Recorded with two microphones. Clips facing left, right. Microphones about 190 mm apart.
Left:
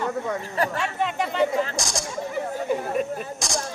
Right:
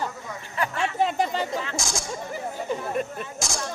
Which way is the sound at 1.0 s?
35° right (ahead or behind).